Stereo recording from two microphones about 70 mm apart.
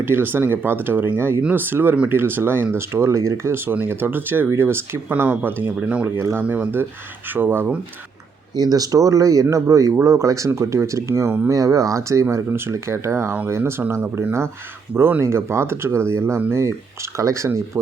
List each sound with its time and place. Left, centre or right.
0.0 s speech: right
8.5 s speech: right
15.2 s speech: right